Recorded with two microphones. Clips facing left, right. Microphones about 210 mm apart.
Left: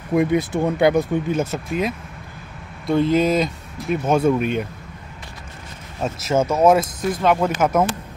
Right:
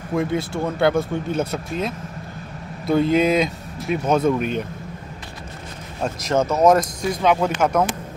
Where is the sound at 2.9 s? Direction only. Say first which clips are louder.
Even; centre (ahead or behind).